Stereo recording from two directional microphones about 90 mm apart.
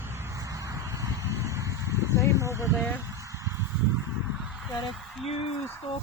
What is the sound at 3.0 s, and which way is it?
Honk, 35° right (ahead or behind).